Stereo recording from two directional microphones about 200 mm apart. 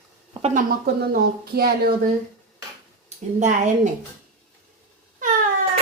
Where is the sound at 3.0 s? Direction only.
35° right (ahead or behind).